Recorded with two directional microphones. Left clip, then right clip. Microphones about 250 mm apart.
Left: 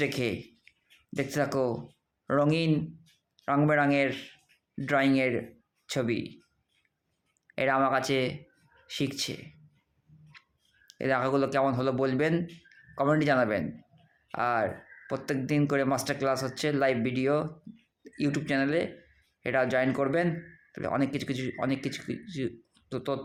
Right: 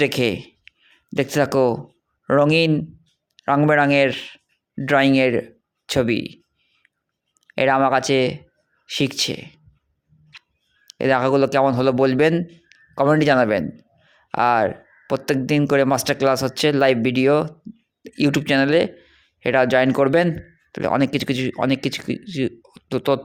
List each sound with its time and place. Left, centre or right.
0.0 s speech: right
7.4 s speech: right
10.8 s speech: right